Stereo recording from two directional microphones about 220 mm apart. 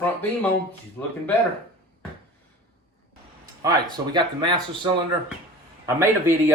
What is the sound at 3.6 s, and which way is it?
A man's voice, 20° right (ahead or behind).